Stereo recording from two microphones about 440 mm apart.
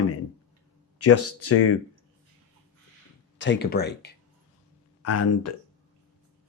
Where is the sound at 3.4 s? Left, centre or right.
Left.